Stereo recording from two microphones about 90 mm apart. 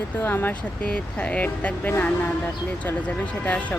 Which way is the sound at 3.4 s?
15° left (ahead or behind).